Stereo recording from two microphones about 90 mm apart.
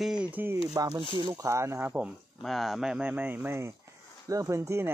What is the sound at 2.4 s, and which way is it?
Speech, centre (ahead or behind).